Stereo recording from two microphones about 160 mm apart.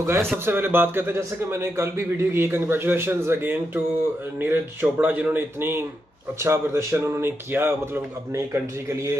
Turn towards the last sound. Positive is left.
turn(degrees=-15)  # may be behind; listen again after turning